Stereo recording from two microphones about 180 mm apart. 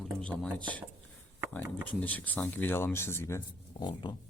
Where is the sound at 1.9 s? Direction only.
10° left (ahead or behind).